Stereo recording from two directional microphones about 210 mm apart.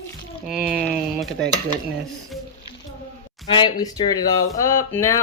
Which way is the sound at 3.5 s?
20° left (ahead or behind).